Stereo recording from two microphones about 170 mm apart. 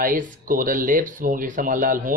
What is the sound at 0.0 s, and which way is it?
Speech, 50° right (ahead or behind).